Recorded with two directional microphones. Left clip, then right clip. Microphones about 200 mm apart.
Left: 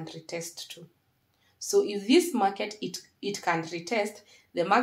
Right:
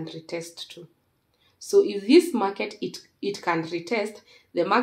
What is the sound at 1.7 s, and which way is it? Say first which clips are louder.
Speech: right 5 dB; 40° right (ahead or behind).